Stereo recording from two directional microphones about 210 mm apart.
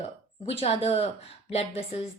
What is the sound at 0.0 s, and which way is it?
Speech, 30° left (ahead or behind).